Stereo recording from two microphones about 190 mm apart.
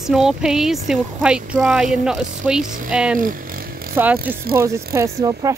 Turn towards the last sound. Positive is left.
turn(degrees=-15)  # may be behind; listen again after turning